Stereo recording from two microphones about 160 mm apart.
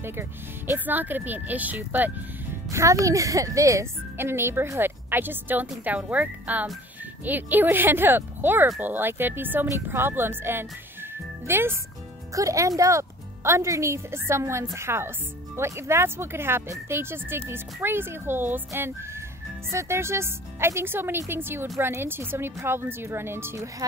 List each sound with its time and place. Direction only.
0.0 s speech: 15° right (ahead or behind)